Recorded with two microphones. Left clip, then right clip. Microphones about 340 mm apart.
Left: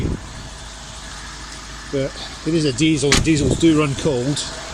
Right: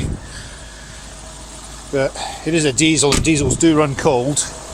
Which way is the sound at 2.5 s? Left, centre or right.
Centre.